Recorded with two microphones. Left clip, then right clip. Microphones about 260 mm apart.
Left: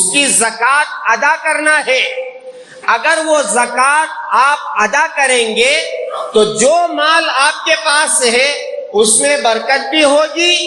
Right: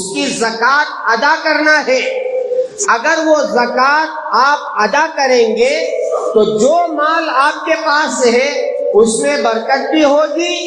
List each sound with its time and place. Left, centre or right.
0.2 s a man's voice: left